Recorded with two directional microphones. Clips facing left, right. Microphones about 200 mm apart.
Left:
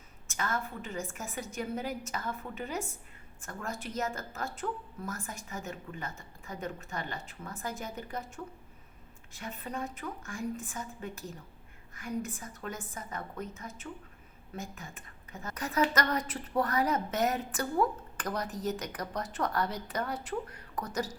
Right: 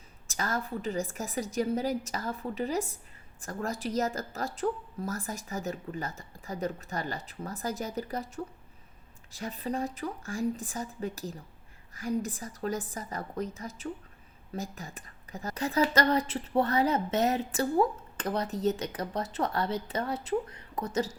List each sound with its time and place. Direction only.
0.3 s speech: 40° right (ahead or behind)
9.3 s a woman's voice: 35° right (ahead or behind)